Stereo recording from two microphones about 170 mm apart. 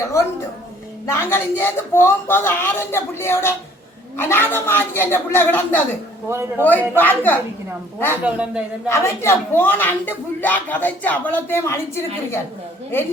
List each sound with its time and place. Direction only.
0.1 s speech: 15° left (ahead or behind)
6.2 s a man's voice: 15° right (ahead or behind)
6.6 s speech: 10° left (ahead or behind)
8.2 s speech: 5° right (ahead or behind)
8.9 s speech: 15° left (ahead or behind)